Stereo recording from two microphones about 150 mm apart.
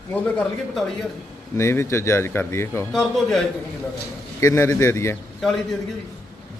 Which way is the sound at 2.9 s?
Centre (ahead or behind).